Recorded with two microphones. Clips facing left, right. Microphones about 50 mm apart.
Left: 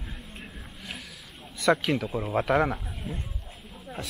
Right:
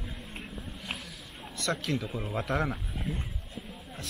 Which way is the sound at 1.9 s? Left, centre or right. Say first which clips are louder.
Left 5 dB; centre.